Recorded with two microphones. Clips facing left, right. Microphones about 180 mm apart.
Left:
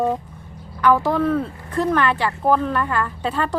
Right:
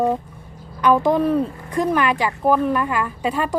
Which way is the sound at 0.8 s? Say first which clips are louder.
Right 1 dB; 20° right (ahead or behind).